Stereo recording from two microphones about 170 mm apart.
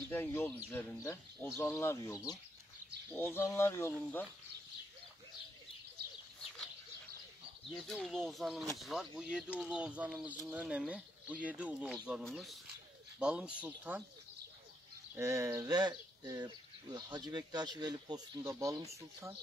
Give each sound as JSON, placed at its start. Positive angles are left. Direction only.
{"t": 0.1, "sound": "speech", "side_deg": 15}
{"t": 7.7, "sound": "speech", "side_deg": 0}
{"t": 15.1, "sound": "speech", "side_deg": -15}